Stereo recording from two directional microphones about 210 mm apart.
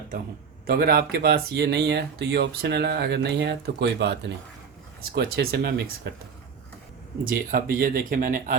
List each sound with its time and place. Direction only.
0.7 s speech: 45° right (ahead or behind)
7.3 s speech: 45° right (ahead or behind)